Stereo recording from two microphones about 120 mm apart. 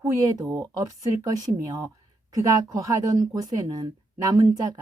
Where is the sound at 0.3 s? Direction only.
30° right (ahead or behind).